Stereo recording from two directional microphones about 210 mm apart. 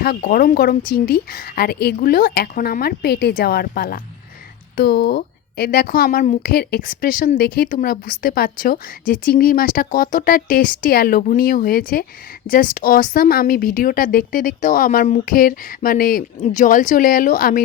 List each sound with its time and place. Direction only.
0.0 s a woman's voice: 45° left (ahead or behind)